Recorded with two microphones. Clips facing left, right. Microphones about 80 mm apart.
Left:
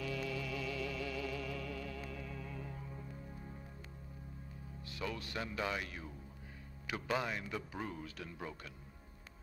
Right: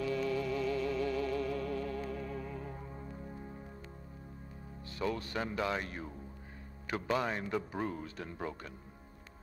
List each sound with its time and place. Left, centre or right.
0.0 s music: right
4.8 s speech: right
7.2 s speech: right